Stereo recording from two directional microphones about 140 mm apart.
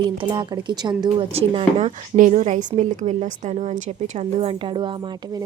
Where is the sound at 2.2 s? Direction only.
65° right (ahead or behind).